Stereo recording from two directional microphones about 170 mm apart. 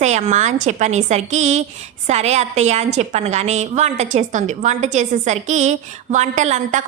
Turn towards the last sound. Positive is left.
turn(degrees=-45)  # may be behind; listen again after turning